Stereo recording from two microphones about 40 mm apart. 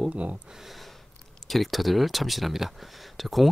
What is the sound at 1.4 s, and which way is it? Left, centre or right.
Speech, centre.